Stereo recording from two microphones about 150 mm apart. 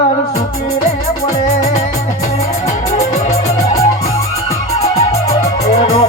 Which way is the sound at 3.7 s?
20° left (ahead or behind).